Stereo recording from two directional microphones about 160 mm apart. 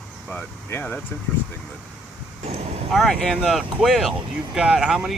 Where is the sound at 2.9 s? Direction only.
Centre (ahead or behind).